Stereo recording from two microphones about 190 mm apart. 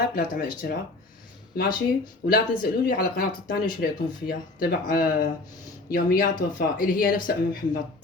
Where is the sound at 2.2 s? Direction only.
50° left (ahead or behind).